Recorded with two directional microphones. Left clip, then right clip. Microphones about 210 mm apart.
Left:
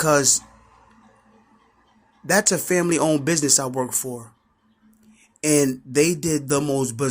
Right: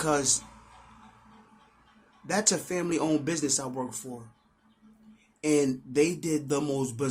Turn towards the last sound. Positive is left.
turn(degrees=25)  # may be behind; listen again after turning